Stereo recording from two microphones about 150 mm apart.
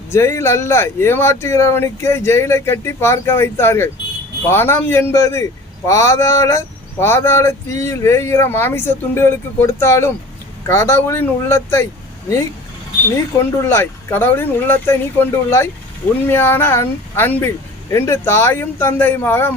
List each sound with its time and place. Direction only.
0.1 s speech: 15° left (ahead or behind)
13.4 s speech: 15° left (ahead or behind)